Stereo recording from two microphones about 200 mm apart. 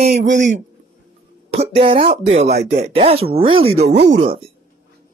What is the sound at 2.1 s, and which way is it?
Speech, 30° right (ahead or behind).